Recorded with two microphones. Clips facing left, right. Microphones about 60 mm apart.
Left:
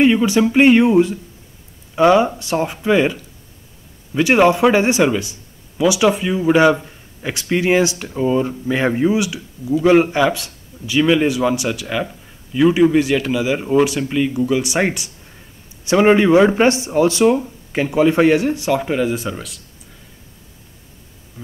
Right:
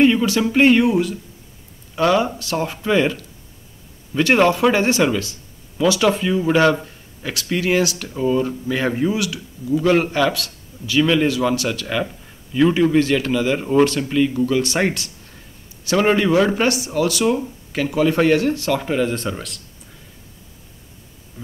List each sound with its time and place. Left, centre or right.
0.0 s speech: centre
0.8 s speech: left
18.8 s speech: centre